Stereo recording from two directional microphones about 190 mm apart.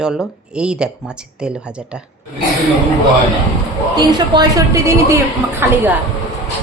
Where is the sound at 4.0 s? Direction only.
20° right (ahead or behind).